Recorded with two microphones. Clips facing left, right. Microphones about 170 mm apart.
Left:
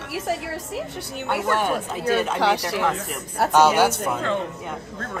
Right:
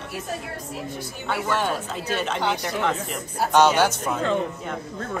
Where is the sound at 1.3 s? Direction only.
5° left (ahead or behind).